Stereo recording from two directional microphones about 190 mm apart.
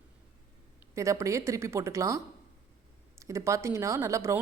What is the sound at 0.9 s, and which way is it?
Speech, 15° right (ahead or behind).